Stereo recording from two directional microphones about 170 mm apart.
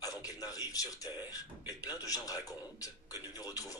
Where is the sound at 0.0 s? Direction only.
20° left (ahead or behind).